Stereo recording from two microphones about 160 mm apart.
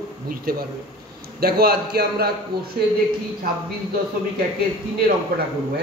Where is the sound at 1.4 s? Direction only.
70° right (ahead or behind).